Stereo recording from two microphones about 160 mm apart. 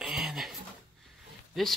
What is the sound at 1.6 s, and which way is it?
Speech, centre (ahead or behind).